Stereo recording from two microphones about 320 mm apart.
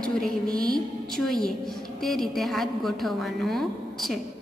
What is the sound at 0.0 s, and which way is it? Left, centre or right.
A woman's voice, centre.